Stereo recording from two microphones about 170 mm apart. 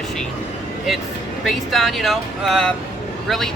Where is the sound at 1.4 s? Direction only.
Centre (ahead or behind).